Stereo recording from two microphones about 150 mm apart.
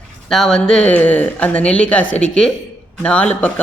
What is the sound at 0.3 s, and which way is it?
Speech, centre (ahead or behind).